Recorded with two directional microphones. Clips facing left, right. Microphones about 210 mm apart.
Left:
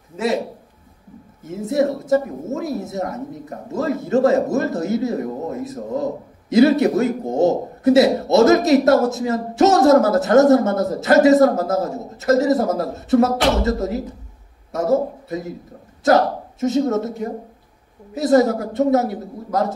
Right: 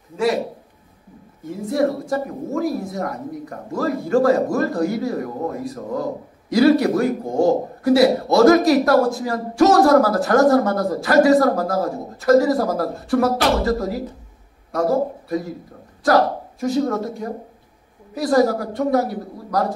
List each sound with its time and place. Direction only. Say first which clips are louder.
1.7 s a man's voice: left 3 dB; 25° left (ahead or behind)
18.1 s a man's voice: left 2 dB; 25° left (ahead or behind)